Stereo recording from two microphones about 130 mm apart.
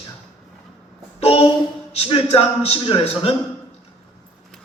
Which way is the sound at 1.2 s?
50° left (ahead or behind).